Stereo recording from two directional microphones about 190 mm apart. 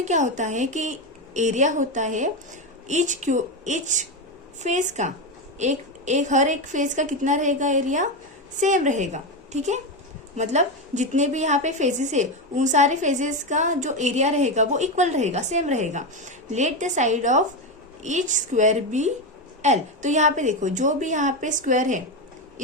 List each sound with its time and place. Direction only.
0.0 s a woman's voice: 40° right (ahead or behind)